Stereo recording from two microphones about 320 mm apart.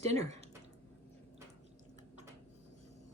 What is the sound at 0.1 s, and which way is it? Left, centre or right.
Speech, centre.